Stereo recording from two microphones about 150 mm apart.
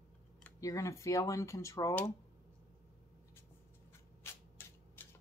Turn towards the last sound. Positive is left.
turn(degrees=15)  # may be behind; listen again after turning